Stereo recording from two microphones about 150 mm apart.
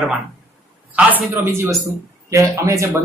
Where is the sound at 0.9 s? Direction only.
10° right (ahead or behind).